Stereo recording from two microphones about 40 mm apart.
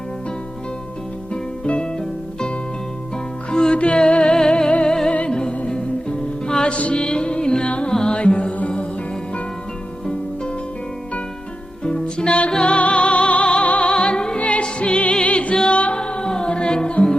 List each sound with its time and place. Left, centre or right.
1.3 s music: left
3.5 s music: left
6.7 s chant: left
7.0 s music: left
11.8 s music: left
13.7 s opera: left
14.3 s music: left